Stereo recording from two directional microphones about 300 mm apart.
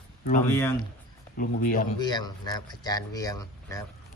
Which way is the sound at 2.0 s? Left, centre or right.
Centre.